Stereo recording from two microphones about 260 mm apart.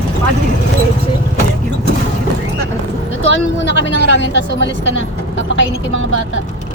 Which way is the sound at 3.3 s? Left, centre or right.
Left.